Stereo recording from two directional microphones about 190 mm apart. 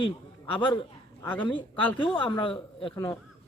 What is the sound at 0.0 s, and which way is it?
A man's voice, 25° left (ahead or behind).